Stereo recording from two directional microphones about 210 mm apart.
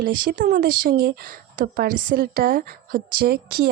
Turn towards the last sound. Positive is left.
turn(degrees=-50)  # may be behind; listen again after turning